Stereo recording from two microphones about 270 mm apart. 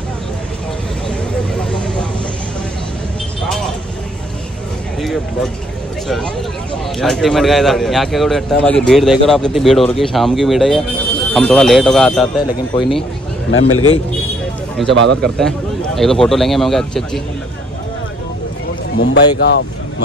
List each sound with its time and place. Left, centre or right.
1.6 s vehicle: centre
5.0 s a sound: centre
6.0 s a man's voice: centre
13.5 s a man's voice: left
14.8 s a man's voice: centre
19.3 s speech: left